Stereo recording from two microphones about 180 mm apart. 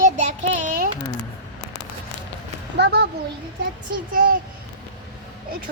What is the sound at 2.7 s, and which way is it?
Speech, 70° right (ahead or behind).